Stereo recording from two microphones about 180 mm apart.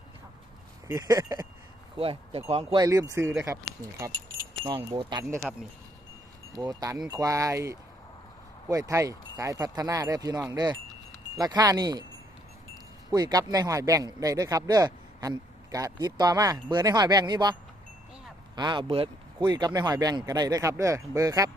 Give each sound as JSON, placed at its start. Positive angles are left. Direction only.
{"t": 0.9, "sound": "a man's voice", "side_deg": -20}
{"t": 2.0, "sound": "speech", "side_deg": -30}
{"t": 2.8, "sound": "speech", "side_deg": -20}
{"t": 4.9, "sound": "a man's voice", "side_deg": -25}
{"t": 5.5, "sound": "speech", "side_deg": 0}
{"t": 6.5, "sound": "a man's voice", "side_deg": -20}
{"t": 13.1, "sound": "a man's voice", "side_deg": -20}